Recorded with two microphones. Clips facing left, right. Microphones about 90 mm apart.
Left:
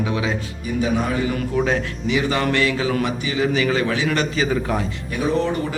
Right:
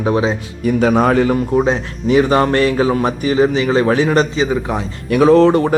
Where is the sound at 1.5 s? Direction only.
30° right (ahead or behind).